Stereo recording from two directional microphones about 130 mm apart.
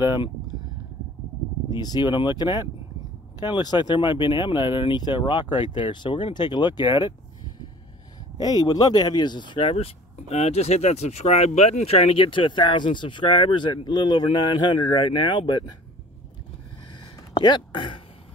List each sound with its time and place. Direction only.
0.0 s speech: 35° left (ahead or behind)
1.7 s speech: 30° left (ahead or behind)
8.4 s speech: 30° left (ahead or behind)
17.3 s speech: 35° left (ahead or behind)